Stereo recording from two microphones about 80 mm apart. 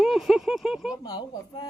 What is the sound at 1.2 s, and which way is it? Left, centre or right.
Speech, left.